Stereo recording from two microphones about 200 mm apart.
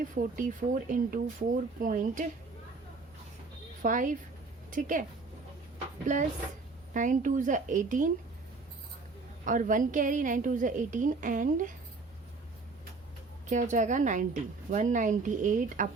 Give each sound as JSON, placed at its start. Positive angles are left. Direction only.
{"t": 0.1, "sound": "a woman's voice", "side_deg": -40}
{"t": 3.8, "sound": "a woman's voice", "side_deg": -40}
{"t": 6.1, "sound": "a woman's voice", "side_deg": -40}
{"t": 9.4, "sound": "a woman's voice", "side_deg": -40}
{"t": 13.5, "sound": "a woman's voice", "side_deg": -40}